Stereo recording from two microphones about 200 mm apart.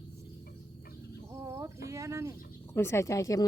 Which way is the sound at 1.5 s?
15° right (ahead or behind).